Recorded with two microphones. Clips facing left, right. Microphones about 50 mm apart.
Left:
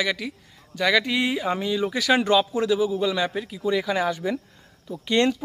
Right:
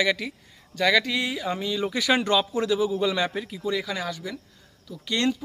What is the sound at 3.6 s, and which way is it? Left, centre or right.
Speech, centre.